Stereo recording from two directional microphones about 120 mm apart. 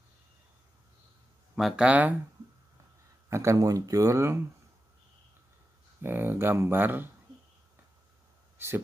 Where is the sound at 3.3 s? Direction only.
25° right (ahead or behind).